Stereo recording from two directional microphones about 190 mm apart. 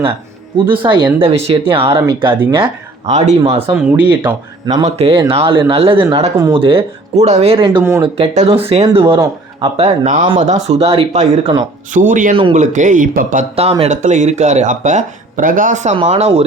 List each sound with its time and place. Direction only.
0.5 s speech: 25° right (ahead or behind)
3.8 s speech: 5° right (ahead or behind)
4.6 s speech: 20° right (ahead or behind); by 12.4 s 45° right (ahead or behind)
12.4 s speech: 30° right (ahead or behind)
12.7 s speech: 40° right (ahead or behind)